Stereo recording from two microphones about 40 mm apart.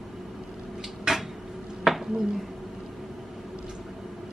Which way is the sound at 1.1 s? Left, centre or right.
Centre.